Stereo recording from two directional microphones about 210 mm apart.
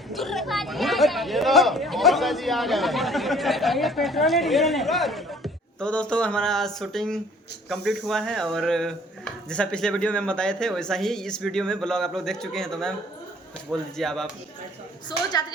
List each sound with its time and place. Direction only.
0.1 s speech: centre (ahead or behind)
15.3 s a woman's voice: 20° left (ahead or behind)